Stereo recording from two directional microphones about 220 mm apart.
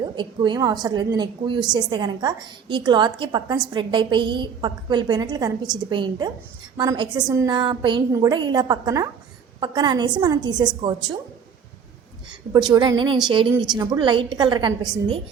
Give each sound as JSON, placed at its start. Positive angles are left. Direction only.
{"t": 0.0, "sound": "a woman's voice", "side_deg": -20}
{"t": 12.3, "sound": "a woman's voice", "side_deg": -20}